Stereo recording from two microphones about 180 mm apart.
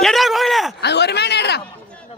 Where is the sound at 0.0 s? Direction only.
Centre (ahead or behind).